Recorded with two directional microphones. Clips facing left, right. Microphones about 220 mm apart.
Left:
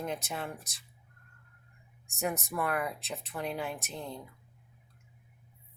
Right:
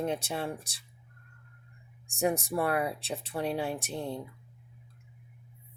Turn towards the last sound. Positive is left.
turn(degrees=-30)  # may be behind; listen again after turning